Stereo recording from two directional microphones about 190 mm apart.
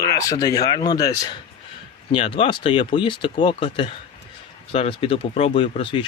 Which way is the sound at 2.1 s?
30° left (ahead or behind).